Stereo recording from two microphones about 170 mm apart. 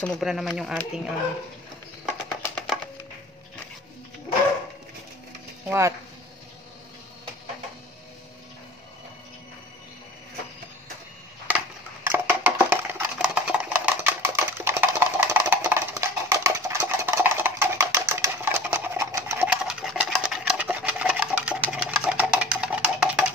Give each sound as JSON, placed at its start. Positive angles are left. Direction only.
{"t": 0.0, "sound": "speech", "side_deg": 0}
{"t": 2.0, "sound": "music", "side_deg": 0}
{"t": 5.7, "sound": "speech", "side_deg": -15}
{"t": 11.4, "sound": "a sound", "side_deg": -10}